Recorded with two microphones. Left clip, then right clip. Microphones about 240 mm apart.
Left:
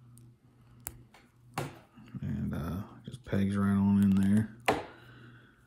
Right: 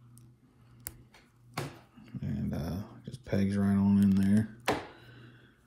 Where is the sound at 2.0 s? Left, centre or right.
Centre.